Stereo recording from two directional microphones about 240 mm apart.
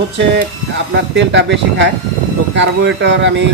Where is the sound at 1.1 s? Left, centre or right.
Right.